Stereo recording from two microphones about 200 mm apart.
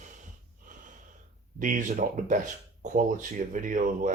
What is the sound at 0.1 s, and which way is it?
Snort, 40° right (ahead or behind).